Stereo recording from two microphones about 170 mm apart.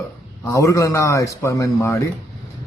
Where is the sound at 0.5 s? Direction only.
20° left (ahead or behind).